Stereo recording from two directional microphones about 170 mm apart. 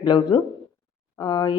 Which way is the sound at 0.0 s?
25° left (ahead or behind).